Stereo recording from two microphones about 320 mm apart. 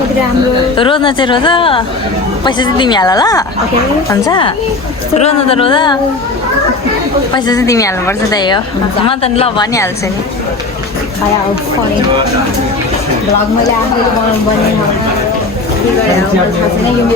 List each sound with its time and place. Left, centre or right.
0.8 s a woman's voice: centre
7.3 s a woman's voice: centre